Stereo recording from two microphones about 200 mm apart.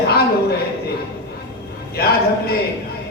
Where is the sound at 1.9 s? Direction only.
50° left (ahead or behind).